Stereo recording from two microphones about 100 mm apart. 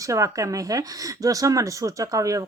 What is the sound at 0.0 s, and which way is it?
Speech, 30° right (ahead or behind).